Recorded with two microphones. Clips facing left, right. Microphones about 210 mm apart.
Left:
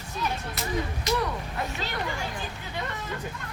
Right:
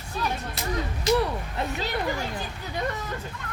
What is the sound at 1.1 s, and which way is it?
Speech, 30° right (ahead or behind).